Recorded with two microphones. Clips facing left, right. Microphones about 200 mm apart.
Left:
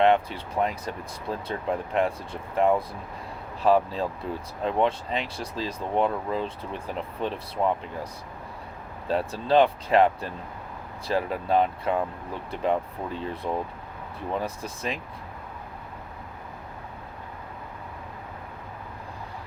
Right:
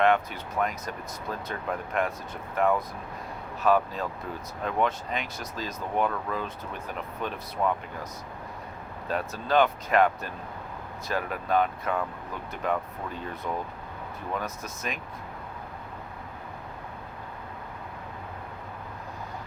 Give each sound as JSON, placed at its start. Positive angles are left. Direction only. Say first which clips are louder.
{"t": 0.0, "sound": "speech", "louder": "left 2 dB", "side_deg": 30}
{"t": 9.0, "sound": "speech", "louder": "left 4 dB", "side_deg": 30}